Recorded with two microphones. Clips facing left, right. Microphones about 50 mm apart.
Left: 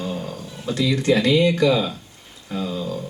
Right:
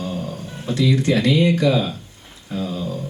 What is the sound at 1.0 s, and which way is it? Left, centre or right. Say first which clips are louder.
Speech: left 3 dB; left.